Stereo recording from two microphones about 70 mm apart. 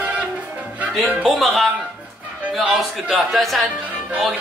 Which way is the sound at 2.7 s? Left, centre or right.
Centre.